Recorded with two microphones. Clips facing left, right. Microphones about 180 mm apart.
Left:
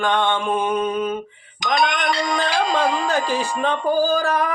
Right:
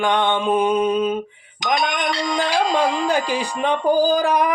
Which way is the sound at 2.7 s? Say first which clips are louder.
Right 1 dB; 15° right (ahead or behind).